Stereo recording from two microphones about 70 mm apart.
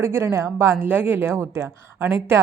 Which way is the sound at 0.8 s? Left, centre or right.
Right.